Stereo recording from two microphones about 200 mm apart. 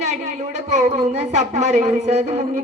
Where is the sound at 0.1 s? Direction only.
35° right (ahead or behind).